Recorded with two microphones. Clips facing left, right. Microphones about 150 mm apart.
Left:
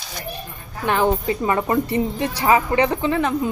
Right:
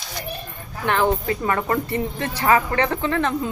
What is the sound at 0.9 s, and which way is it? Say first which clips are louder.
Speech: left 1 dB; 15° left (ahead or behind).